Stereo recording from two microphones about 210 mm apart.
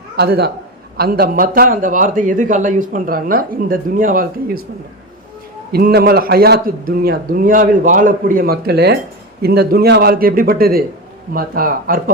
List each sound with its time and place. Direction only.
0.2 s a man's voice: 50° right (ahead or behind)
5.7 s a man's voice: 45° right (ahead or behind)